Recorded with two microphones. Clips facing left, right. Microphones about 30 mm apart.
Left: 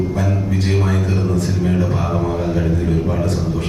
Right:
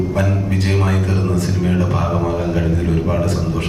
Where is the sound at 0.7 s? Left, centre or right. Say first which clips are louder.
Even; right.